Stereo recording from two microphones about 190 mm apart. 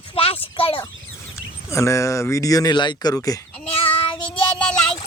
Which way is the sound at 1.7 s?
15° left (ahead or behind).